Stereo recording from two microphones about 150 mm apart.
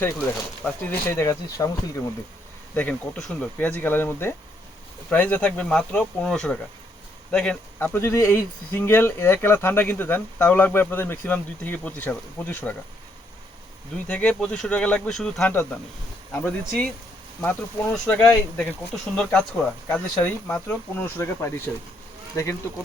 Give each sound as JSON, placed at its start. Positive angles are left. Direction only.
{"t": 0.0, "sound": "speech", "side_deg": 10}
{"t": 2.7, "sound": "speech", "side_deg": 10}
{"t": 13.9, "sound": "speech", "side_deg": 10}
{"t": 17.9, "sound": "speech", "side_deg": 5}